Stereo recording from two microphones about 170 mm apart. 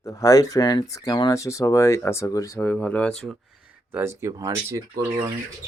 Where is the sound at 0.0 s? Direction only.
20° left (ahead or behind); by 3.3 s 5° left (ahead or behind).